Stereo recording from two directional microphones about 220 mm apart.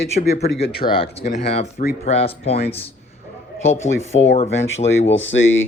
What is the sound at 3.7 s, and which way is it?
Speech, 30° left (ahead or behind).